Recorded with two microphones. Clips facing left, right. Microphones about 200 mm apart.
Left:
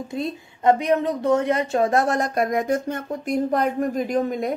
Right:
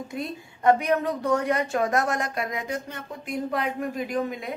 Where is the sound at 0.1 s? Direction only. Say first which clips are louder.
Left 5 dB; 25° left (ahead or behind).